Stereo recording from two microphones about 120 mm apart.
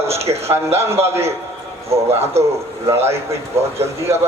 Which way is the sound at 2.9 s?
20° right (ahead or behind).